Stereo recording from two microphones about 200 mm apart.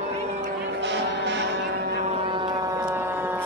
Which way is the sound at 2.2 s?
25° right (ahead or behind).